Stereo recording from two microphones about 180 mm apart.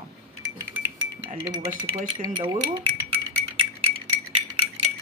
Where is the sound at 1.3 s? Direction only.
35° right (ahead or behind).